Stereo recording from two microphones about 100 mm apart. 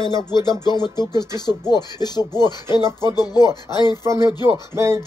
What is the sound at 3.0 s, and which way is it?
Music, 45° left (ahead or behind).